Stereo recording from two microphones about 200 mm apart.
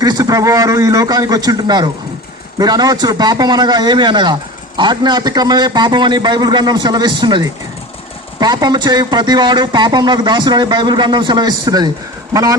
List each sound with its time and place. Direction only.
0.0 s a man's voice: 20° right (ahead or behind)